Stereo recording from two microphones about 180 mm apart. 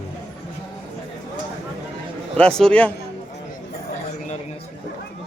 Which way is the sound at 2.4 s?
5° left (ahead or behind).